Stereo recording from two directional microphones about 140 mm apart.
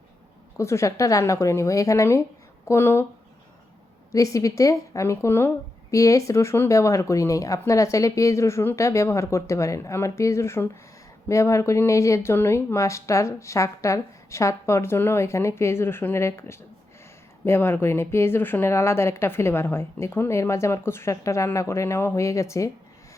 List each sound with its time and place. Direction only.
0.5 s speech: 20° left (ahead or behind)
4.1 s speech: 25° left (ahead or behind)